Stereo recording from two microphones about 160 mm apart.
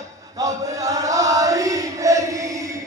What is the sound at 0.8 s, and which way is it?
Chant, 20° right (ahead or behind).